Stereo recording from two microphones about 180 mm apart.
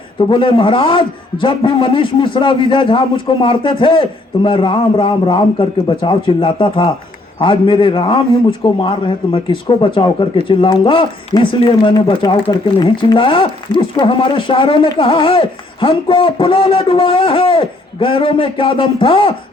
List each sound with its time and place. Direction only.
0.3 s speech: 30° left (ahead or behind)